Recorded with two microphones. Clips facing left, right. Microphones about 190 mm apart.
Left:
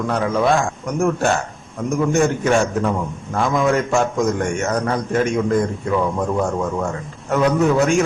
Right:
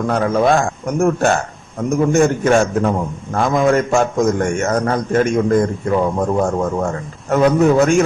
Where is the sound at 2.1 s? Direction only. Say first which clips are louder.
Right 3 dB; 45° right (ahead or behind).